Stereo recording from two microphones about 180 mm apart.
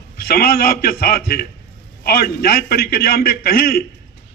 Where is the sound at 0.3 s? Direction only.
55° left (ahead or behind).